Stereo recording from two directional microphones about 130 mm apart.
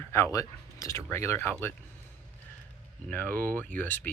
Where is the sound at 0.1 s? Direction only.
25° left (ahead or behind).